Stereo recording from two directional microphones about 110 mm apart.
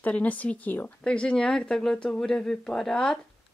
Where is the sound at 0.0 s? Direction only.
15° left (ahead or behind).